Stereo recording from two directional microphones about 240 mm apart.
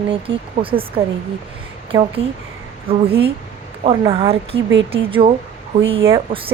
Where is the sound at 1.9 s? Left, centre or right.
Right.